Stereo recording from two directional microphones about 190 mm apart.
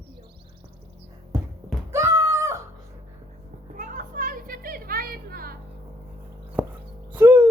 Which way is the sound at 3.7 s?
45° right (ahead or behind).